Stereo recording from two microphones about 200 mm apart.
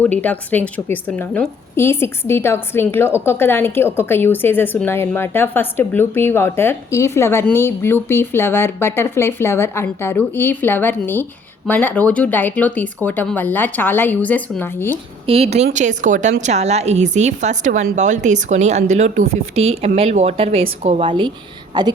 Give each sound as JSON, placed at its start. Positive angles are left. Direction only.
{"t": 0.0, "sound": "a woman's voice", "side_deg": 10}
{"t": 15.3, "sound": "a woman's voice", "side_deg": -30}